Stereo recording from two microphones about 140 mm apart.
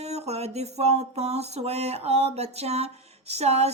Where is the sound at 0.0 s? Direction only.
50° right (ahead or behind).